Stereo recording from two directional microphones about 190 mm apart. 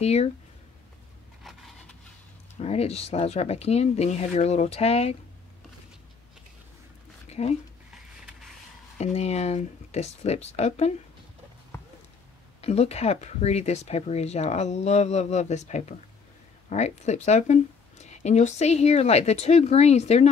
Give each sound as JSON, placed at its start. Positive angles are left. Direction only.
{"t": 0.0, "sound": "speech", "side_deg": 35}
{"t": 1.4, "sound": "a sound", "side_deg": 0}
{"t": 2.6, "sound": "speech", "side_deg": 35}
{"t": 7.2, "sound": "a sound", "side_deg": 35}
{"t": 8.9, "sound": "speech", "side_deg": 35}
{"t": 12.6, "sound": "speech", "side_deg": 35}